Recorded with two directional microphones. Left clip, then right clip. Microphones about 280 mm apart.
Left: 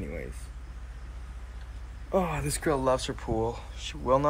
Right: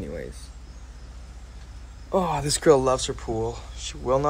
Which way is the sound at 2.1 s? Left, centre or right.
Centre.